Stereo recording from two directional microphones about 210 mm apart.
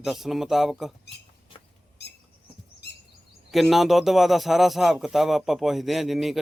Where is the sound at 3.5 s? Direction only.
Centre (ahead or behind).